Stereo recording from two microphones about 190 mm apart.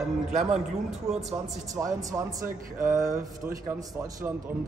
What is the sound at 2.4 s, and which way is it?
Speech, 45° right (ahead or behind).